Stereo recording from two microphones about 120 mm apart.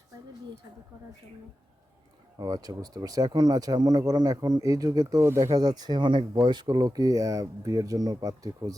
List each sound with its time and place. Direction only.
2.4 s speech: 30° right (ahead or behind)